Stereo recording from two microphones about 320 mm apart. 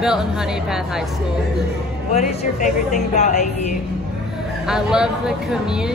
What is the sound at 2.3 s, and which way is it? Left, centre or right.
Speech, left.